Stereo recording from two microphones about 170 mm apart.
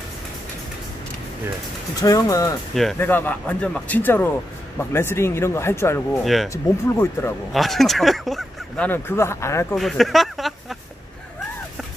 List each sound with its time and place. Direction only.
2.0 s speech: 20° left (ahead or behind)
2.7 s speech: centre (ahead or behind)
6.2 s speech: centre (ahead or behind)
6.5 s speech: 15° left (ahead or behind)
7.5 s speech: centre (ahead or behind); by 9.8 s 15° left (ahead or behind)
9.8 s speech: centre (ahead or behind)